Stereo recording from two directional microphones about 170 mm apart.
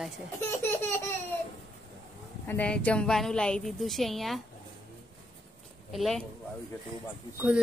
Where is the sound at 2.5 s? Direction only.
10° left (ahead or behind).